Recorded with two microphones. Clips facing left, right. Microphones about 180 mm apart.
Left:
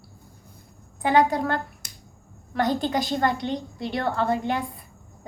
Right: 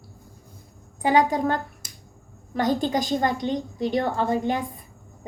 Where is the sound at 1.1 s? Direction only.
15° right (ahead or behind).